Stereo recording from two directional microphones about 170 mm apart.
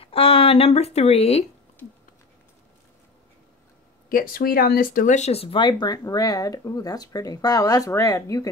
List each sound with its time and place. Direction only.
0.0 s speech: 35° left (ahead or behind)
4.1 s speech: 60° left (ahead or behind); by 8.5 s 20° left (ahead or behind)